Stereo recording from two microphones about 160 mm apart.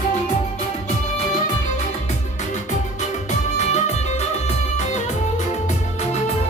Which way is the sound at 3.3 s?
45° left (ahead or behind).